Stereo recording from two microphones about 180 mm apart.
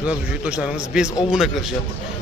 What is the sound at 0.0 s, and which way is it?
Speech, 5° right (ahead or behind).